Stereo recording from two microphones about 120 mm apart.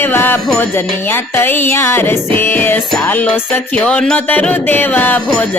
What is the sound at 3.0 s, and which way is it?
Speech, 15° left (ahead or behind).